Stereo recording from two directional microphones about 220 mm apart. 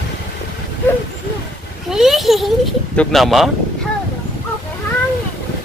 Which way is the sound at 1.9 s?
Centre (ahead or behind).